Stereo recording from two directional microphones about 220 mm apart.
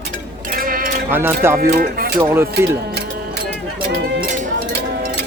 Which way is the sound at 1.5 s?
45° right (ahead or behind).